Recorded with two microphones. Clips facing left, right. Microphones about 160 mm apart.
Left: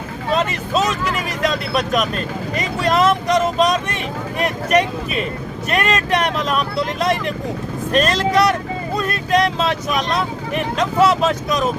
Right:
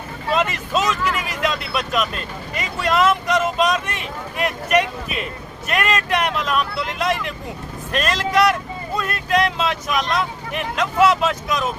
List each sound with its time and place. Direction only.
0.3 s speech: 35° left (ahead or behind)